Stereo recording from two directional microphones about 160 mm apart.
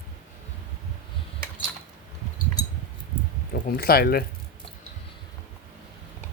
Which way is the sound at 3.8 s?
70° left (ahead or behind).